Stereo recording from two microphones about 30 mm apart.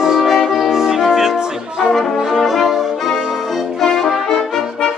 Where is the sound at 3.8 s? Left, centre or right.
Centre.